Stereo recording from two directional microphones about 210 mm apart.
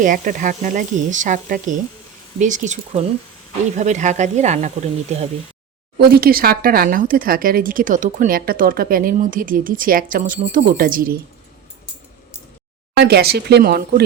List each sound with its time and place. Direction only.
0.0 s speech: 40° right (ahead or behind)
6.0 s speech: 45° right (ahead or behind)
13.0 s speech: 50° right (ahead or behind)